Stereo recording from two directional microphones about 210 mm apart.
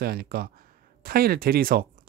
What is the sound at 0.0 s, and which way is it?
Speech, 45° right (ahead or behind).